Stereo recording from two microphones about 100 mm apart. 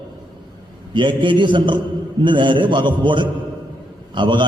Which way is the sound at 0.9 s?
55° right (ahead or behind).